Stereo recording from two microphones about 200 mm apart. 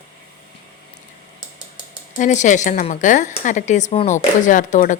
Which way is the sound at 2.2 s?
40° left (ahead or behind).